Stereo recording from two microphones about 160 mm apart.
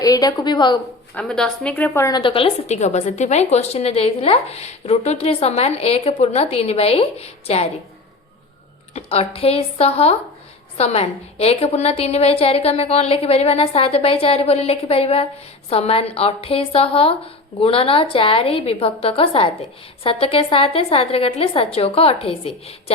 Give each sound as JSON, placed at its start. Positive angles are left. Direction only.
{"t": 0.0, "sound": "a woman's voice", "side_deg": 25}
{"t": 1.1, "sound": "a woman's voice", "side_deg": 5}
{"t": 2.0, "sound": "a woman's voice", "side_deg": 30}
{"t": 8.9, "sound": "a woman's voice", "side_deg": 40}